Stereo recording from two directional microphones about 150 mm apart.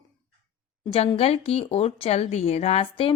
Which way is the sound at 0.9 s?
40° left (ahead or behind).